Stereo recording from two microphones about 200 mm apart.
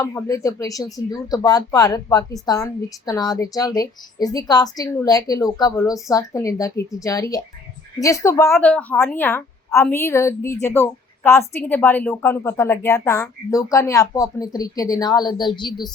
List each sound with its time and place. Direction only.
0.0 s a woman's voice: 15° left (ahead or behind)